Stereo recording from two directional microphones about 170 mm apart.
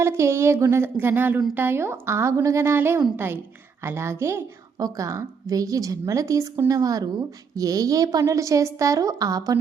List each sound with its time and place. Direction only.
0.0 s a woman's voice: 15° right (ahead or behind)